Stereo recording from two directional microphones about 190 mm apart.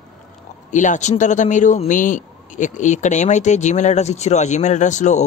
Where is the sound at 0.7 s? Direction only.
40° left (ahead or behind).